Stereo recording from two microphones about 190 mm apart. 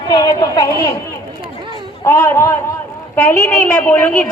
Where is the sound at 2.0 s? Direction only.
10° left (ahead or behind).